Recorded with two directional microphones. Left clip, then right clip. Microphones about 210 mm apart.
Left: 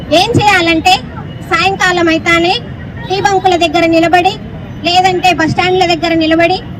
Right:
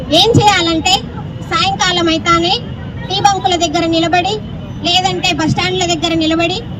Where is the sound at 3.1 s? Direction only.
70° right (ahead or behind).